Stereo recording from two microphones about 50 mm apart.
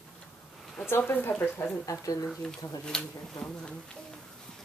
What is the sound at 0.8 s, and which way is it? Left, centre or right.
Speech, left.